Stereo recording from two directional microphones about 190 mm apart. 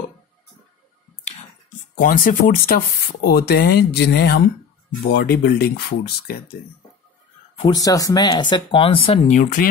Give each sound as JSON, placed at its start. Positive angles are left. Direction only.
{"t": 2.0, "sound": "speech", "side_deg": 45}
{"t": 7.5, "sound": "speech", "side_deg": 20}